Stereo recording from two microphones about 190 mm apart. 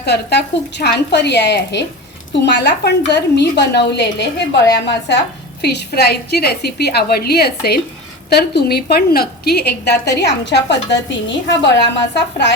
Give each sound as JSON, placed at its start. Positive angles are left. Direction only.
{"t": 0.0, "sound": "a woman's voice", "side_deg": 60}